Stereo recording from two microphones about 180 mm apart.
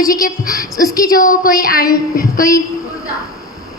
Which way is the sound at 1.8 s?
20° left (ahead or behind).